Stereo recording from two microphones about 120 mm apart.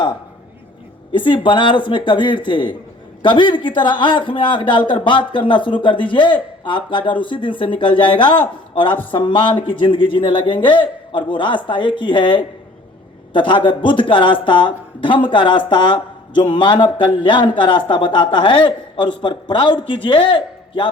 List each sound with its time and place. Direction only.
1.1 s a man's voice: 40° left (ahead or behind)